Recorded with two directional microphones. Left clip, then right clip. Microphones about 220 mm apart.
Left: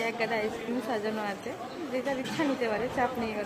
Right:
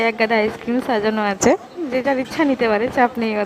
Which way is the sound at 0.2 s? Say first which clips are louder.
Right 12 dB; 45° right (ahead or behind).